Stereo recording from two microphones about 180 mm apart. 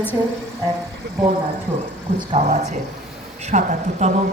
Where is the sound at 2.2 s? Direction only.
35° right (ahead or behind).